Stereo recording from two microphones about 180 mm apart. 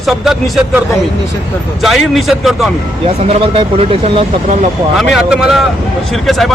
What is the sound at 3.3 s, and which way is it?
Speech, 30° right (ahead or behind).